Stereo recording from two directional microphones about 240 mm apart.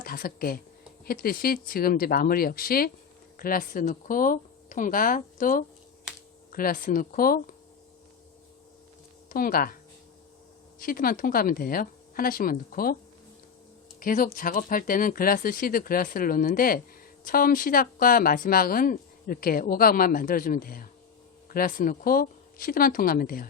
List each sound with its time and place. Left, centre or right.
0.0 s speech: left
9.3 s speech: left
10.8 s speech: left
14.0 s speech: left